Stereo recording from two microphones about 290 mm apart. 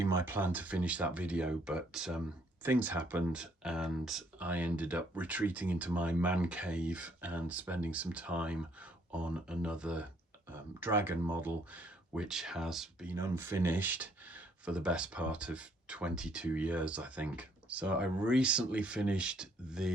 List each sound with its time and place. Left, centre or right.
0.0 s speech: centre